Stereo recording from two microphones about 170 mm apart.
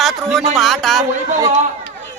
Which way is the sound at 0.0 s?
Centre (ahead or behind).